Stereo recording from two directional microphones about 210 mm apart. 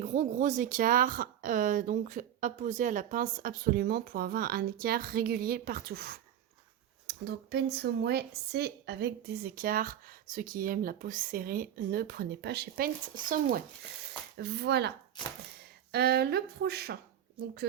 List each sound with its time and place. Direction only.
0.0 s speech: 35° right (ahead or behind)